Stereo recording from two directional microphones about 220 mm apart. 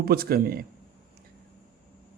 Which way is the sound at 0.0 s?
45° right (ahead or behind).